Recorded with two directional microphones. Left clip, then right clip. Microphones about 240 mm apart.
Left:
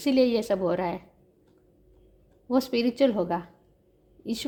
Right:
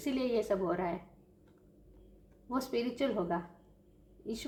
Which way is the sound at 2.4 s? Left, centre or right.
Left.